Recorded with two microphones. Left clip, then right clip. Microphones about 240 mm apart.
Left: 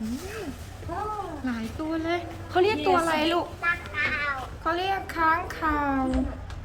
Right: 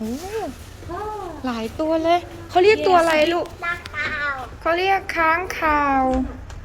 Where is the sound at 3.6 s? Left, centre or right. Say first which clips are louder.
Right 1 dB; right.